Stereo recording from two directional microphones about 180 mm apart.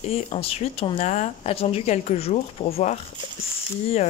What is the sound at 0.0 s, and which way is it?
Speech, 35° left (ahead or behind).